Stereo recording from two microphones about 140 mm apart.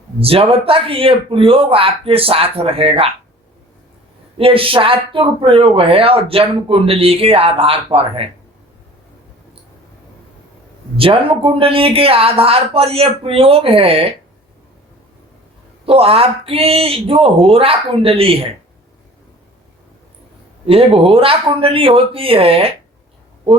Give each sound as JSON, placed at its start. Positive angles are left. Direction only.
{"t": 0.2, "sound": "speech", "side_deg": -45}
{"t": 4.4, "sound": "speech", "side_deg": -40}
{"t": 10.9, "sound": "speech", "side_deg": -40}
{"t": 15.9, "sound": "speech", "side_deg": -45}
{"t": 20.7, "sound": "speech", "side_deg": -40}